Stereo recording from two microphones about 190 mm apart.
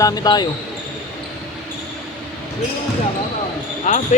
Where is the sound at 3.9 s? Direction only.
35° left (ahead or behind).